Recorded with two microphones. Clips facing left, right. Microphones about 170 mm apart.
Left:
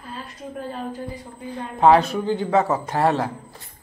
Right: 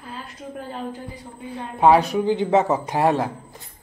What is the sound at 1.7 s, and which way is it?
A man's voice, 10° right (ahead or behind).